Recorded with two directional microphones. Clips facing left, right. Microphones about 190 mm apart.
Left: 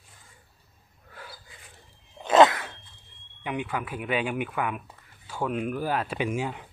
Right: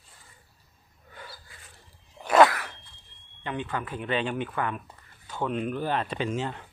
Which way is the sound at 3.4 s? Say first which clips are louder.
Left 1 dB; 10° left (ahead or behind).